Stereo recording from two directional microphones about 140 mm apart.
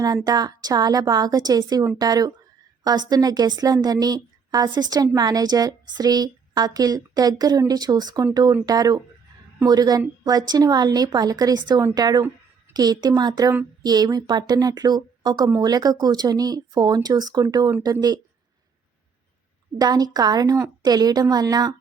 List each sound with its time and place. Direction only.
0.0 s speech: 25° right (ahead or behind)
19.8 s speech: 30° right (ahead or behind)